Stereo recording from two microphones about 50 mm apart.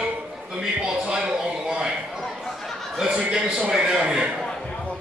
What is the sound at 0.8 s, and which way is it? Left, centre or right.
Speech, centre.